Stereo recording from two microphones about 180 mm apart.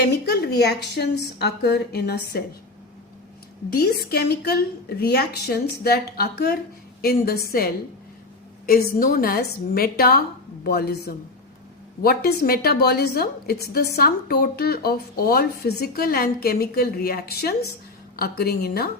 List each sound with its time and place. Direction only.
0.0 s speech: 65° left (ahead or behind)
3.8 s speech: 60° left (ahead or behind)
8.6 s speech: 55° left (ahead or behind)